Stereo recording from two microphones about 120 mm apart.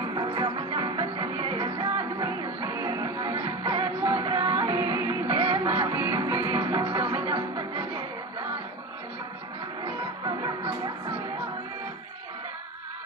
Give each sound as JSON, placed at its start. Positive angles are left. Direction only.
{"t": 0.1, "sound": "music", "side_deg": -40}
{"t": 10.2, "sound": "music", "side_deg": -35}